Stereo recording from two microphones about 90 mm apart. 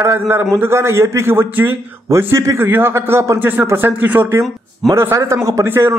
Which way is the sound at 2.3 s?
35° right (ahead or behind).